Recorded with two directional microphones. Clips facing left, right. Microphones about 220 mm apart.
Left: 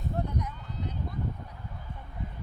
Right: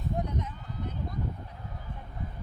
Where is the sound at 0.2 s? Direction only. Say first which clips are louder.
Even; 25° right (ahead or behind).